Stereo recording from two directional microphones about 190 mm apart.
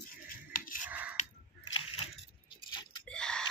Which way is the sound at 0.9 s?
10° right (ahead or behind).